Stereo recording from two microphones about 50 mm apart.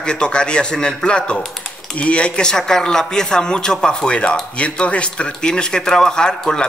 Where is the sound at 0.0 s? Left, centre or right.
Centre.